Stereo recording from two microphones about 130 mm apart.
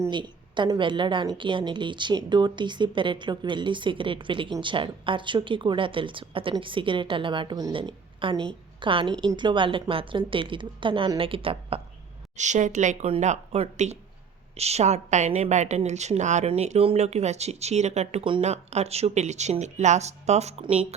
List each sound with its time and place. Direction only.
0.1 s a woman's voice: 35° right (ahead or behind)
12.4 s a woman's voice: 65° right (ahead or behind); by 20.8 s 50° right (ahead or behind)